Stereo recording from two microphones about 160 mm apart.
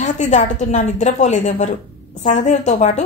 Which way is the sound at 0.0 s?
50° left (ahead or behind).